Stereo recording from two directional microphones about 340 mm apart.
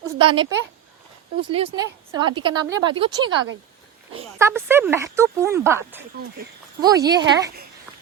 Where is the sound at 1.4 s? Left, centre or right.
Centre.